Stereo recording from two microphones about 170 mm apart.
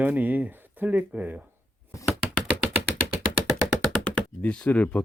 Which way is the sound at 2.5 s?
10° right (ahead or behind).